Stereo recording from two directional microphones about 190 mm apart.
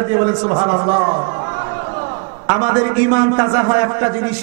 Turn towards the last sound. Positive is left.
turn(degrees=-20)  # may be behind; listen again after turning